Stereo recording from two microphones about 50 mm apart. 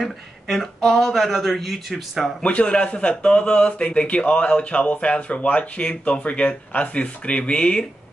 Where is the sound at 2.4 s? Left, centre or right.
Left.